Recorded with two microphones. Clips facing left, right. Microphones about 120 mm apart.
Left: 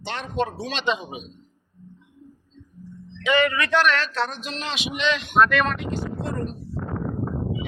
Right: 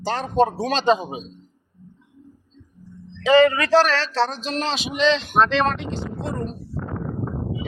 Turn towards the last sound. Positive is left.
turn(degrees=-30)  # may be behind; listen again after turning